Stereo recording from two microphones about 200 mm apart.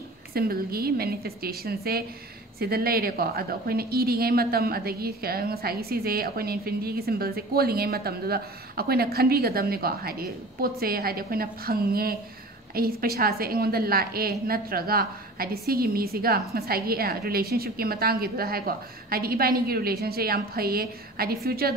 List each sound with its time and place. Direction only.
0.3 s a woman's voice: 50° right (ahead or behind)